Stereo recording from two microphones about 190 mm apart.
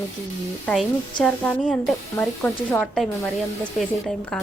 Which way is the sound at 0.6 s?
5° left (ahead or behind).